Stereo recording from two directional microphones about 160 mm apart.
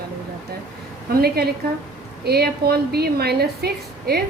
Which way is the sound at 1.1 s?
80° right.